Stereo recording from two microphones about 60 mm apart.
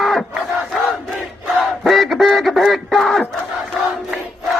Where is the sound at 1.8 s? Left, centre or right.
Centre.